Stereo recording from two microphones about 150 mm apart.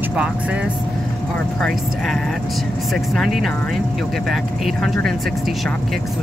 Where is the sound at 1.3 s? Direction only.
5° left (ahead or behind).